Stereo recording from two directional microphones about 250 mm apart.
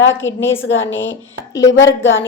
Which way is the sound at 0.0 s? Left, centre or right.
Left.